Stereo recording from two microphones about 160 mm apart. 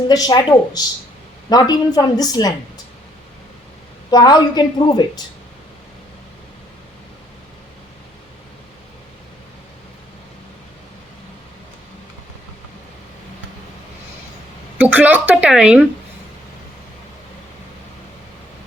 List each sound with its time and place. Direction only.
0.1 s a woman's voice: 25° left (ahead or behind)
4.1 s a woman's voice: 25° left (ahead or behind)
14.8 s a woman's voice: 10° right (ahead or behind)